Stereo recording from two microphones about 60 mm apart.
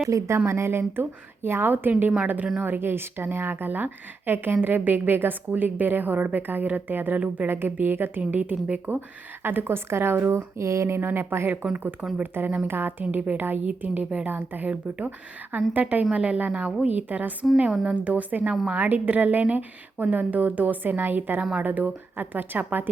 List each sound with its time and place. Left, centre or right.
0.1 s speech: right
0.4 s a woman's voice: right
9.0 s a woman's voice: right
10.6 s speech: right
11.5 s a woman's voice: centre
14.3 s a woman's voice: right